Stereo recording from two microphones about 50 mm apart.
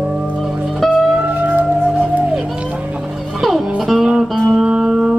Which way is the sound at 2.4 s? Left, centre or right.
Right.